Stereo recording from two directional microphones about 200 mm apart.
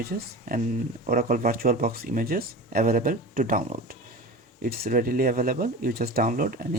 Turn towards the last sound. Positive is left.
turn(degrees=-45)  # may be behind; listen again after turning